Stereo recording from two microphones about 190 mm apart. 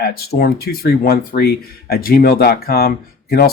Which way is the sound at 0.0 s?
55° left (ahead or behind).